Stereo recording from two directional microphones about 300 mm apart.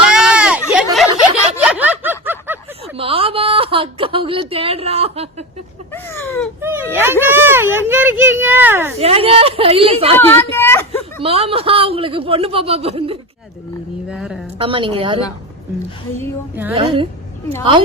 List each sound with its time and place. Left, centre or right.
0.1 s a sound: centre
1.6 s snicker: centre
2.8 s a woman's voice: centre
5.9 s a sound: centre
6.6 s speech: centre
9.0 s a man's voice: centre
10.2 s a woman's voice: centre
11.2 s a man's voice: centre
14.1 s speech: centre
14.6 s speech: centre
16.7 s speech: centre